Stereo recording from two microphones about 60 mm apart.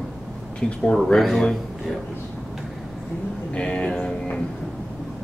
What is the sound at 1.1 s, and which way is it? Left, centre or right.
Speech, centre.